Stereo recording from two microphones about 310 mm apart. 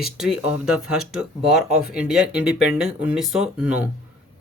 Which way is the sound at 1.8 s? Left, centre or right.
Centre.